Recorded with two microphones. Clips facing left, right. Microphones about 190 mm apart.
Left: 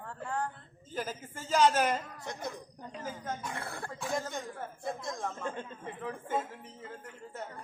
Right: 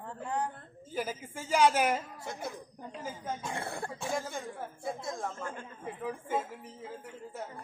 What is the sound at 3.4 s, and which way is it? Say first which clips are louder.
Speech: right 3 dB; 25° right (ahead or behind).